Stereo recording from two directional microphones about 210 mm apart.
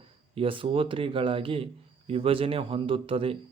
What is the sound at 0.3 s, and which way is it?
Speech, 25° right (ahead or behind).